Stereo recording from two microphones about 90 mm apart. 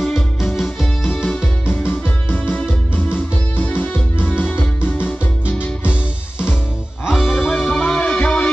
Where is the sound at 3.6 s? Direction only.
20° left (ahead or behind).